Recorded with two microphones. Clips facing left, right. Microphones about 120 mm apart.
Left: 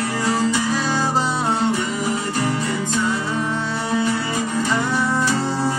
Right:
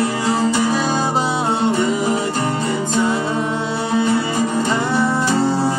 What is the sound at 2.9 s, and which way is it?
Music, 30° right (ahead or behind).